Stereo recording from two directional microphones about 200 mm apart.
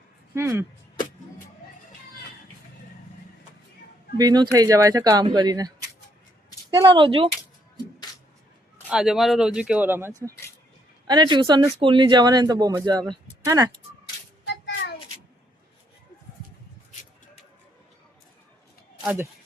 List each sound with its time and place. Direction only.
0.3 s speech: 10° right (ahead or behind)
4.2 s speech: 20° right (ahead or behind)
6.7 s speech: 20° right (ahead or behind)
8.9 s speech: centre (ahead or behind)
11.0 s speech: 20° right (ahead or behind)
14.4 s a sound: 60° left (ahead or behind)
19.0 s speech: 10° right (ahead or behind)